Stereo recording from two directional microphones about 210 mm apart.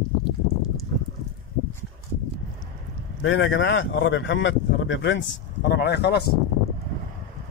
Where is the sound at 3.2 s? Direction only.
65° left (ahead or behind).